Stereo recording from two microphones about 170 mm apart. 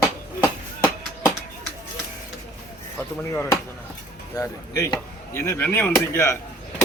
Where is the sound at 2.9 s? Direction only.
15° left (ahead or behind).